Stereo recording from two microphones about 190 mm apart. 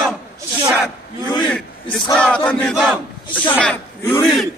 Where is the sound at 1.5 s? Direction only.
5° left (ahead or behind).